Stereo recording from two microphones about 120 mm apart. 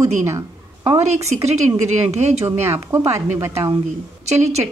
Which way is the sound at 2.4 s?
25° right (ahead or behind).